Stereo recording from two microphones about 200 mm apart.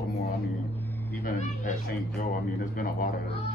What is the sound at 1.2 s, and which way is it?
Speech, 40° left (ahead or behind).